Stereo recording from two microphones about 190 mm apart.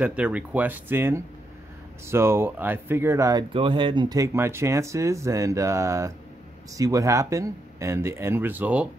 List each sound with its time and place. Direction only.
0.0 s speech: 5° right (ahead or behind)